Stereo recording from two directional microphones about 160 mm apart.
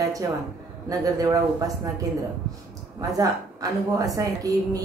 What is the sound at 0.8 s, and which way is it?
Speech, 20° right (ahead or behind).